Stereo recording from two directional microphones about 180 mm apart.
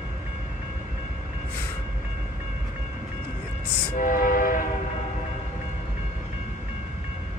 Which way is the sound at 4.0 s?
50° left (ahead or behind).